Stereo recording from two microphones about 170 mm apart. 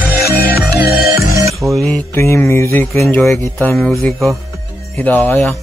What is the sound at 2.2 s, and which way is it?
Speech, 15° left (ahead or behind).